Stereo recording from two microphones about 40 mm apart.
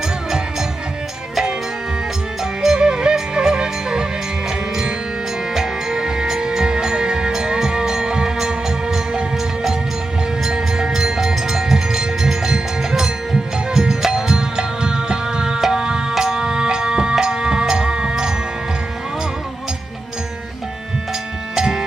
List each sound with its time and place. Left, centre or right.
2.4 s music: centre
10.4 s music: centre
21.5 s music: centre